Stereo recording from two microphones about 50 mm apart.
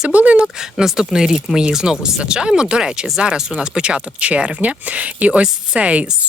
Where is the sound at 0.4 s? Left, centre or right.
Centre.